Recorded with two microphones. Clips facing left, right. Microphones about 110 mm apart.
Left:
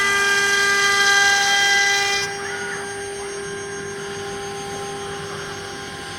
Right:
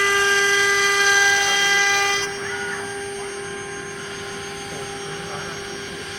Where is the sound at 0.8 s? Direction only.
90° left.